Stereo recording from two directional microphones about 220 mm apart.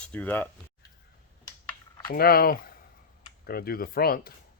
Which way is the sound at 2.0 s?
45° left (ahead or behind).